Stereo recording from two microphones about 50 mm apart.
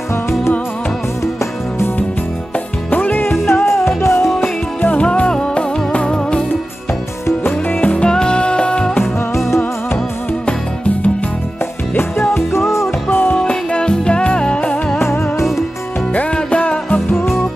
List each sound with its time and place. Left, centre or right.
2.9 s music: left
3.6 s music: left
4.8 s music: left
7.4 s music: left
8.1 s music: centre
12.0 s music: left
13.4 s music: centre
15.0 s music: left
16.3 s music: left